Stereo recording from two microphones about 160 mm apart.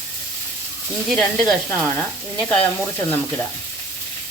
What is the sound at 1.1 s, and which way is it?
Speech, centre (ahead or behind).